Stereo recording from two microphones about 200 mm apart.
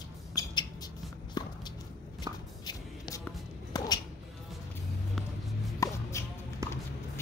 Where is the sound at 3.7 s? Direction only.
20° left (ahead or behind).